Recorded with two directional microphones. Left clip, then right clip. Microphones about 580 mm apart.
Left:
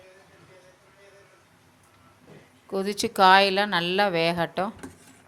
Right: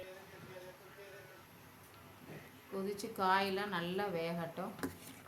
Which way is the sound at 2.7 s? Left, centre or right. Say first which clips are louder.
Left 17 dB; centre.